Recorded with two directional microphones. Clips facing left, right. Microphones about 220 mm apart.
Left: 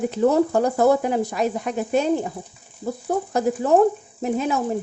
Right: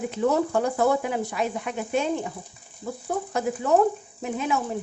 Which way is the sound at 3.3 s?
35° left (ahead or behind).